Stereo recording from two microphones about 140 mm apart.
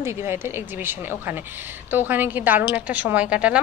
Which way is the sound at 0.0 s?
20° right (ahead or behind).